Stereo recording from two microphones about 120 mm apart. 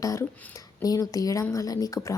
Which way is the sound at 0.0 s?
25° left (ahead or behind).